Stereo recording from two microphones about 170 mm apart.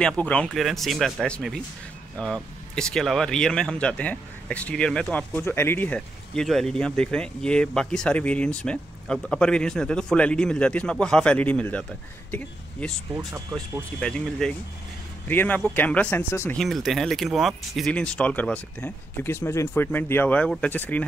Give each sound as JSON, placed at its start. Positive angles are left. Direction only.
{"t": 0.0, "sound": "speech", "side_deg": 5}
{"t": 13.1, "sound": "speech", "side_deg": -15}
{"t": 13.9, "sound": "speech", "side_deg": 5}
{"t": 16.5, "sound": "speech", "side_deg": 0}